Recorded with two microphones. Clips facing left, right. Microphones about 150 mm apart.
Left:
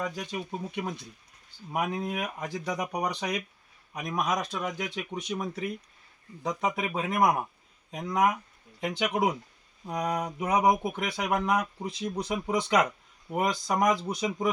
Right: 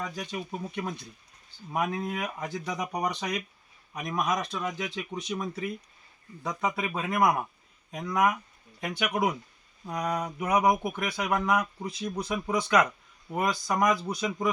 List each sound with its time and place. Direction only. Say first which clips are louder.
0.0 s speech: left 1 dB; 15° left (ahead or behind)